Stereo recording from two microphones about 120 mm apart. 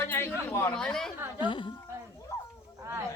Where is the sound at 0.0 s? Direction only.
20° left (ahead or behind).